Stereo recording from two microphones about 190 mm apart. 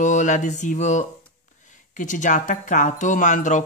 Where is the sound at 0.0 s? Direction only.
40° left (ahead or behind).